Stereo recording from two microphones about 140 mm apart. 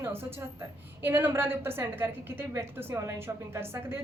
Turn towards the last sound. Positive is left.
turn(degrees=-15)  # may be behind; listen again after turning